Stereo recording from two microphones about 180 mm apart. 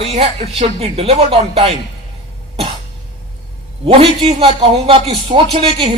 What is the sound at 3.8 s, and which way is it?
Speech, 30° right (ahead or behind).